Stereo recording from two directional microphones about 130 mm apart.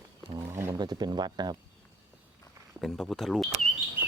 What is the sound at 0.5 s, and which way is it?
Speech, 25° right (ahead or behind).